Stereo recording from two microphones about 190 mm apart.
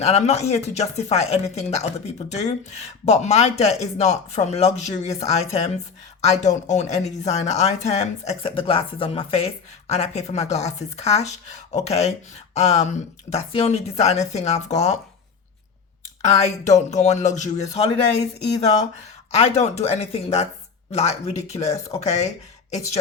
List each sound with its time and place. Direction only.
0.0 s speech: 35° left (ahead or behind)
16.4 s speech: 35° left (ahead or behind)
19.3 s speech: 35° left (ahead or behind)